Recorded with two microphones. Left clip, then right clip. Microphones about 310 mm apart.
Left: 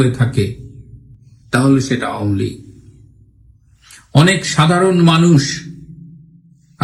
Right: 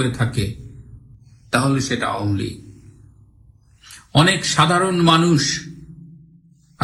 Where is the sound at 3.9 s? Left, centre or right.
Centre.